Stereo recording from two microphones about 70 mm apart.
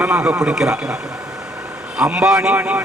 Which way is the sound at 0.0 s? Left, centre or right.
Right.